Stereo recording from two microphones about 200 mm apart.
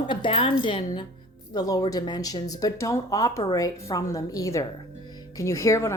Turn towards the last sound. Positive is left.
turn(degrees=15)  # may be behind; listen again after turning